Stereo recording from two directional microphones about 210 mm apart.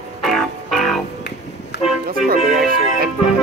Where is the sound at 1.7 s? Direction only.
50° left (ahead or behind).